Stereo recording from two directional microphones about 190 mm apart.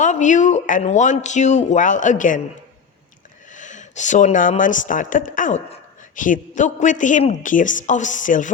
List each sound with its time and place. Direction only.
0.0 s speech: 40° left (ahead or behind)
3.5 s speech: 40° left (ahead or behind)